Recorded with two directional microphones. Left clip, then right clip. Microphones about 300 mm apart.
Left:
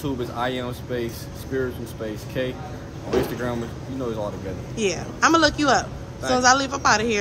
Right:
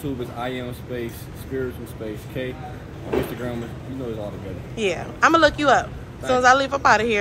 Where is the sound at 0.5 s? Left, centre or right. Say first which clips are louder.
Left 2 dB; centre.